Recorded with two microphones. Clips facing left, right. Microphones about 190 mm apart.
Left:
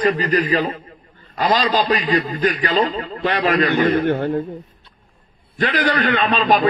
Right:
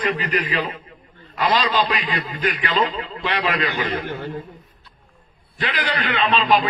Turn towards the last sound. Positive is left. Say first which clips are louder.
# left 3 dB
turn(degrees=45)  # may be behind; listen again after turning